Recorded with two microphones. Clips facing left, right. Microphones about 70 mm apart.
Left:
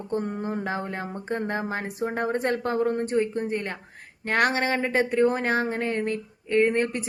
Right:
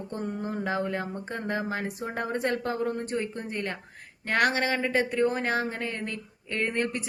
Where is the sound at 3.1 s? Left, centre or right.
Left.